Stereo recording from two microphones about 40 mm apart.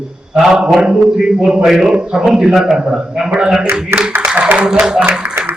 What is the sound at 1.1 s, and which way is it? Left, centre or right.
Speech, centre.